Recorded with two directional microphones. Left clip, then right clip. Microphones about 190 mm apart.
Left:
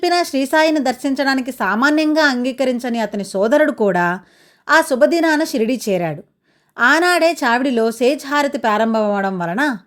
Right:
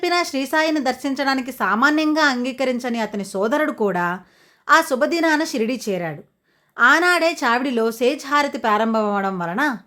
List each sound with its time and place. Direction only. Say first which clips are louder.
0.0 s speech: left 4 dB; 25° left (ahead or behind)